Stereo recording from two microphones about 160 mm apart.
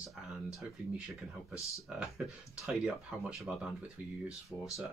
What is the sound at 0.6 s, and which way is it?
Speech, 5° right (ahead or behind).